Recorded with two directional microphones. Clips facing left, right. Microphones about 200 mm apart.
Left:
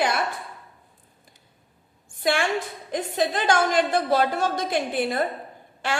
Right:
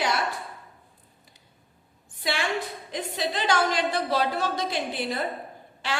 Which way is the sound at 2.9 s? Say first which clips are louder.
Left 5 dB; 50° left (ahead or behind).